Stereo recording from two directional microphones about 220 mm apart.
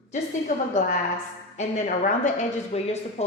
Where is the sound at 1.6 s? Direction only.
35° left (ahead or behind).